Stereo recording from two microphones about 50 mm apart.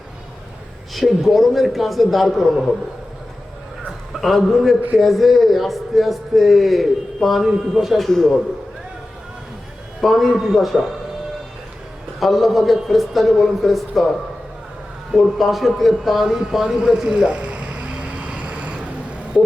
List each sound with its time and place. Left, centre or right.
0.9 s a man's voice: centre
3.8 s a man's voice: centre
10.0 s a man's voice: centre
12.2 s a man's voice: centre
16.7 s vehicle: centre